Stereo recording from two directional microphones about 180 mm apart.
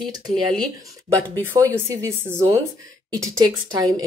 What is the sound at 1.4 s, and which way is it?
Speech, 15° right (ahead or behind).